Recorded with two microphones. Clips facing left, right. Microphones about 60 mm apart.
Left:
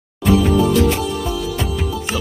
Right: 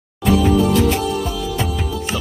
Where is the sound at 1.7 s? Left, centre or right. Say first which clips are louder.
Left 1 dB; centre.